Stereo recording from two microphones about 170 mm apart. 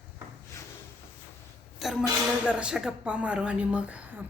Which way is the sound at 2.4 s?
5° right (ahead or behind).